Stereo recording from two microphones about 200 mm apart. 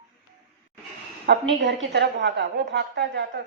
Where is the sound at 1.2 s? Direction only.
60° right (ahead or behind).